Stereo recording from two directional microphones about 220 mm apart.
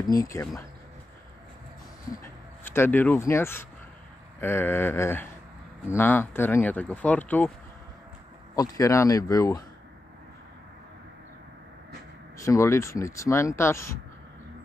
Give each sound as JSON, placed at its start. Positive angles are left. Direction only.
{"t": 0.0, "sound": "speech", "side_deg": 15}
{"t": 2.2, "sound": "speech", "side_deg": 10}
{"t": 8.5, "sound": "speech", "side_deg": 15}
{"t": 12.4, "sound": "speech", "side_deg": 15}